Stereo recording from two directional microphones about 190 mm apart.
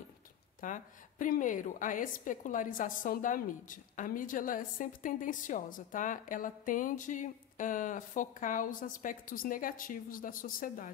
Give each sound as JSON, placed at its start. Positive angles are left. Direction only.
{"t": 0.6, "sound": "a woman's voice", "side_deg": 45}